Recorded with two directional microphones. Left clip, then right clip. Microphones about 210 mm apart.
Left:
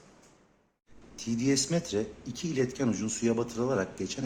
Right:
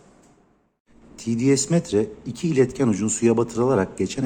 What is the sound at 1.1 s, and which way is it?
Speech, 20° right (ahead or behind).